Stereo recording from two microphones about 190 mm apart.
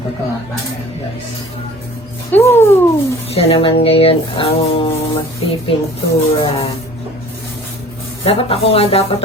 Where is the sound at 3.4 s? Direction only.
30° left (ahead or behind).